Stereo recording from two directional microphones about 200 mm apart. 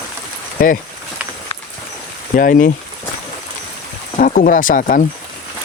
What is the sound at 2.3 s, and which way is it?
Speech, 45° left (ahead or behind).